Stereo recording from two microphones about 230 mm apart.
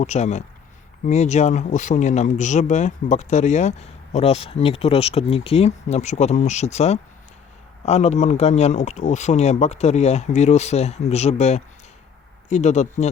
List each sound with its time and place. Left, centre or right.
0.0 s speech: left